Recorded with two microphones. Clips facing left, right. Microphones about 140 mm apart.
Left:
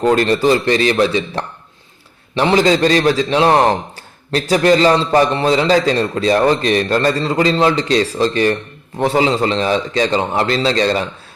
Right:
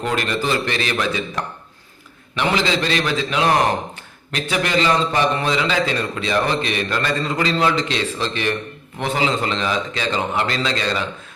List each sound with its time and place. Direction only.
0.0 s a man's voice: 35° left (ahead or behind)